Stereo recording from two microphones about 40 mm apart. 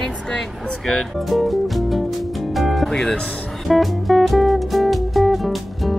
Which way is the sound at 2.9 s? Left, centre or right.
Centre.